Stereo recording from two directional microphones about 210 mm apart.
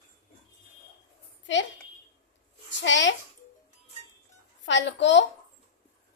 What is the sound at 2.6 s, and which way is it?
Speech, 60° left (ahead or behind).